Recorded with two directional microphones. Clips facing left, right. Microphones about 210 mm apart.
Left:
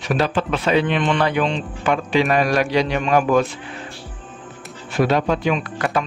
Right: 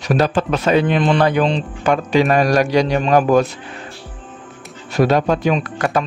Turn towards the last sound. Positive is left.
turn(degrees=-45)  # may be behind; listen again after turning